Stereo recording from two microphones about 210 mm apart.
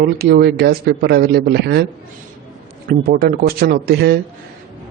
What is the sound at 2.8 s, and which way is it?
Speech, 45° right (ahead or behind).